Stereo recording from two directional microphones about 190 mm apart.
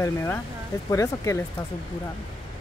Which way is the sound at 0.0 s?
15° left (ahead or behind).